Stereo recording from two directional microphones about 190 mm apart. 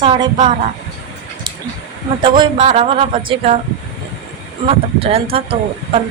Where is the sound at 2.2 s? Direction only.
25° right (ahead or behind).